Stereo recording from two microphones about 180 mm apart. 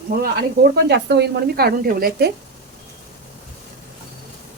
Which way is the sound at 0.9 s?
70° right (ahead or behind).